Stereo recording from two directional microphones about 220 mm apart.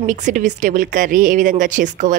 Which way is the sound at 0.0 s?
35° right (ahead or behind).